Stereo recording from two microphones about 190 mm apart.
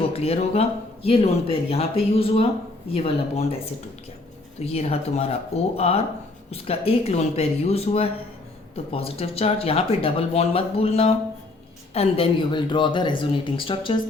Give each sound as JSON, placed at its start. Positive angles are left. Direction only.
{"t": 0.1, "sound": "speech", "side_deg": 30}
{"t": 4.6, "sound": "speech", "side_deg": 30}